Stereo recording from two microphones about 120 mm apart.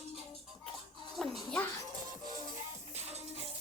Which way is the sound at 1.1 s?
Centre (ahead or behind).